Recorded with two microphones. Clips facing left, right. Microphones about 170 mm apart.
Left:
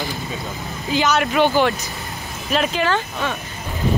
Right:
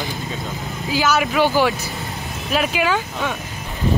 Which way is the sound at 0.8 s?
5° right (ahead or behind).